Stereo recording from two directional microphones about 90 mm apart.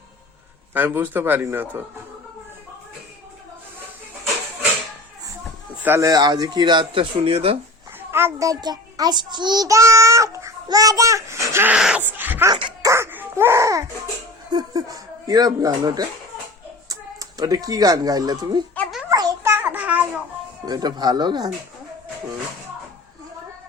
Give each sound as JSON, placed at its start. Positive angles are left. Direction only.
{"t": 0.7, "sound": "a man's voice", "side_deg": -25}
{"t": 6.0, "sound": "speech", "side_deg": -45}
{"t": 8.1, "sound": "a child's voice", "side_deg": -25}
{"t": 8.4, "sound": "a child's voice", "side_deg": -45}
{"t": 9.6, "sound": "a child's voice", "side_deg": -35}
{"t": 11.7, "sound": "speech", "side_deg": -10}
{"t": 12.0, "sound": "a sound", "side_deg": -20}
{"t": 12.8, "sound": "music", "side_deg": -30}
{"t": 14.5, "sound": "speech", "side_deg": -45}
{"t": 19.0, "sound": "a sound", "side_deg": -45}
{"t": 19.4, "sound": "babbling", "side_deg": -25}
{"t": 20.7, "sound": "a child's voice", "side_deg": -50}